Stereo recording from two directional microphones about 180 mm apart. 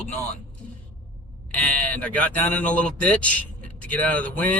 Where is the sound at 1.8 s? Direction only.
10° left (ahead or behind).